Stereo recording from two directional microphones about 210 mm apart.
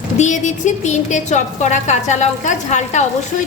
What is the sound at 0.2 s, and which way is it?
A woman's voice, 35° left (ahead or behind).